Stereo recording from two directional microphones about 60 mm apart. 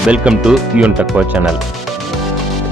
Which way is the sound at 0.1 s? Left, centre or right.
Centre.